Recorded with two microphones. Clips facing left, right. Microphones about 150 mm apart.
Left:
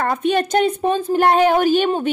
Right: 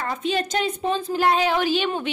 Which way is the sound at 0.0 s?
55° left (ahead or behind).